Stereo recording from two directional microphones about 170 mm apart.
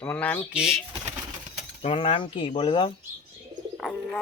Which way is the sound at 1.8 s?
35° left (ahead or behind).